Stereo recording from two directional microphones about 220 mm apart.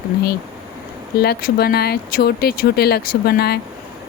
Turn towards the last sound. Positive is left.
turn(degrees=45)  # may be behind; listen again after turning